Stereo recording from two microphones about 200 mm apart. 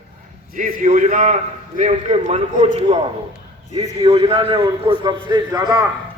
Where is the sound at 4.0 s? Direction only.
25° right (ahead or behind).